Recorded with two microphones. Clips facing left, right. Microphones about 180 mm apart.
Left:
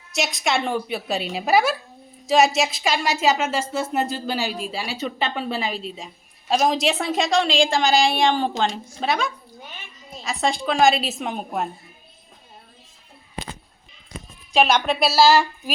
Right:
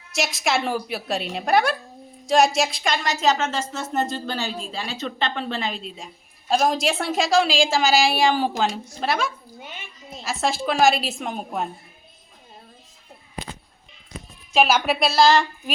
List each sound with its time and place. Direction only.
0.1 s a woman's voice: centre (ahead or behind)
9.6 s a sound: 20° right (ahead or behind)
10.2 s a woman's voice: centre (ahead or behind)
14.5 s a woman's voice: centre (ahead or behind)